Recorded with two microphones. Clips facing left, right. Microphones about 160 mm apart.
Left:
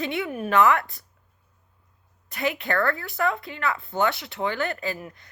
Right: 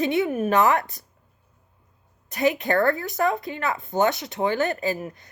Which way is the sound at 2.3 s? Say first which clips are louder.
Right 5 dB; 20° right (ahead or behind).